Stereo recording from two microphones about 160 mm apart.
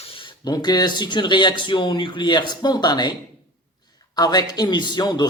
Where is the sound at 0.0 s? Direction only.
35° left (ahead or behind).